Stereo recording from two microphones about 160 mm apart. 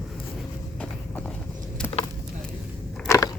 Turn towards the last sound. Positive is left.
turn(degrees=20)  # may be behind; listen again after turning